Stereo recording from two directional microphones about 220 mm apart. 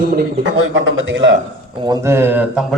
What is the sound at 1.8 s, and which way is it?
Speech, 10° right (ahead or behind).